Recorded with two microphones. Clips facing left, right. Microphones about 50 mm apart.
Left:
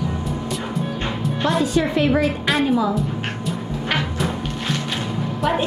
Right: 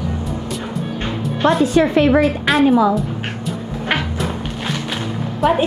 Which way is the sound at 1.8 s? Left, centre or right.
Right.